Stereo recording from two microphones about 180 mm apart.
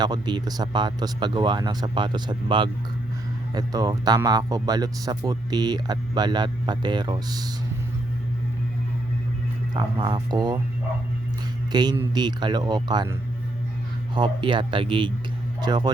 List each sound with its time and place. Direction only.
0.0 s speech: 25° right (ahead or behind)
9.7 s speech: 25° right (ahead or behind)
11.7 s speech: 25° right (ahead or behind)
14.2 s speech: 25° right (ahead or behind)